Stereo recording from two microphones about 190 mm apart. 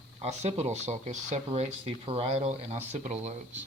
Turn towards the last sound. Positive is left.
turn(degrees=-40)  # may be behind; listen again after turning